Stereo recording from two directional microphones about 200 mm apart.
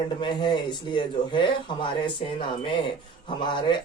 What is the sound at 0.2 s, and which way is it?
Speech, 25° left (ahead or behind).